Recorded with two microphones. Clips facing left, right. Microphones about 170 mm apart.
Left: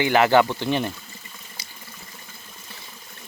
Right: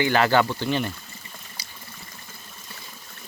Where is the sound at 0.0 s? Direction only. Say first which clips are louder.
Left 3 dB; 15° left (ahead or behind).